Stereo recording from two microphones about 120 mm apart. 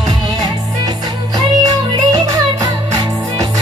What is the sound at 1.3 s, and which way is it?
Music, 30° right (ahead or behind).